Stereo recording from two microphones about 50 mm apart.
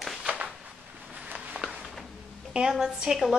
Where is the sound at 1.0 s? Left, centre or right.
Right.